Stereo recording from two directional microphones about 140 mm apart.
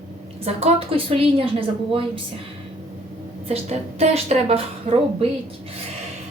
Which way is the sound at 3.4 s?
45° right (ahead or behind).